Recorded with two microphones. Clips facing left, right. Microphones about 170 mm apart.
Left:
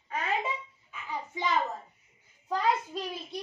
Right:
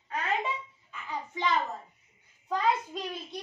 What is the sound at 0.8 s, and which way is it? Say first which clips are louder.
A child's voice: even; 10° left (ahead or behind).